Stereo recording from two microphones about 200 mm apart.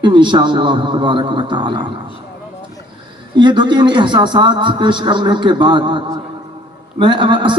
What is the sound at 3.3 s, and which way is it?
A man's voice, 25° right (ahead or behind).